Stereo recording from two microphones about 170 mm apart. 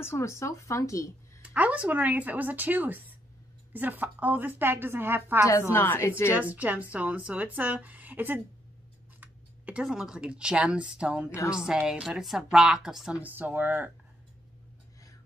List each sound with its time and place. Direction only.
0.0 s speech: 15° left (ahead or behind)
1.4 s speech: 10° right (ahead or behind)
5.5 s speech: 15° left (ahead or behind)
6.3 s speech: 10° right (ahead or behind)
11.2 s speech: 15° left (ahead or behind)
11.5 s a woman's voice: 5° right (ahead or behind)